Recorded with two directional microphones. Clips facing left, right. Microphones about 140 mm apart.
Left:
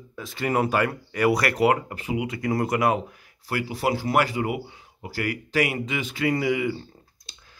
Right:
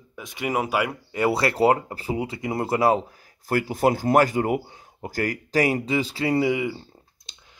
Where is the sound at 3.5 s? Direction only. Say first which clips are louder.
Right 4 dB; 45° right (ahead or behind); by 6.7 s 25° right (ahead or behind).